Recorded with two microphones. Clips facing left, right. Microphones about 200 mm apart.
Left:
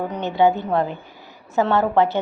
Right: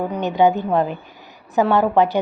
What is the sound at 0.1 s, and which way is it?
A woman's voice, 15° right (ahead or behind).